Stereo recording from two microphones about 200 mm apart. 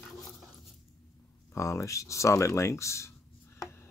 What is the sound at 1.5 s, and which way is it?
Speech, 15° left (ahead or behind).